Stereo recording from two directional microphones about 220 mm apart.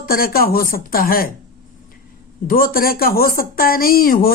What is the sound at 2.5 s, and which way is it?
Speech, 40° left (ahead or behind).